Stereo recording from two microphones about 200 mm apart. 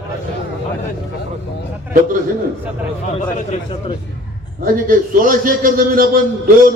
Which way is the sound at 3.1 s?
30° left (ahead or behind).